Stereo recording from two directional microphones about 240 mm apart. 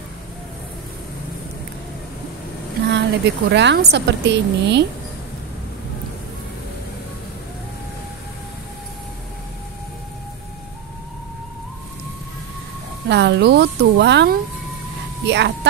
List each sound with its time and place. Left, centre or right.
2.9 s a woman's voice: right
13.1 s a woman's voice: right